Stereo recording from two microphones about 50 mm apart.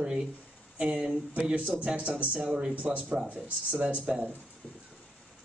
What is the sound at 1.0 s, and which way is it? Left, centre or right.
Speech, centre.